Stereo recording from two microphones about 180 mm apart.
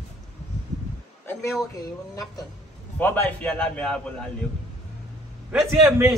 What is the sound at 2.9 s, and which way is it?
A man's voice, 10° left (ahead or behind).